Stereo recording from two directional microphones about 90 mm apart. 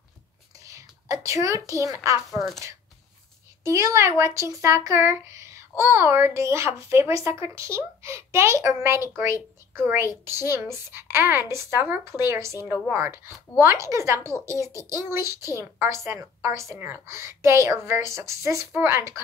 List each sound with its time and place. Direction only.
0.7 s a woman's voice: 35° right (ahead or behind)
3.6 s a woman's voice: 35° right (ahead or behind)